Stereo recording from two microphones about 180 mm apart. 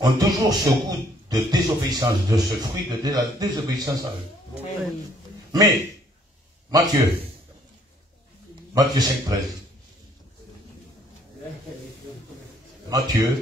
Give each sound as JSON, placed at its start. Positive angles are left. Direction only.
{"t": 0.0, "sound": "a man's voice", "side_deg": -20}
{"t": 5.5, "sound": "a man's voice", "side_deg": -20}
{"t": 8.9, "sound": "a man's voice", "side_deg": -20}
{"t": 12.9, "sound": "a man's voice", "side_deg": -20}